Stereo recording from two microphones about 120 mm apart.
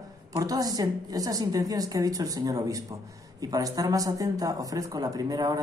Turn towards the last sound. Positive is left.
turn(degrees=-35)  # may be behind; listen again after turning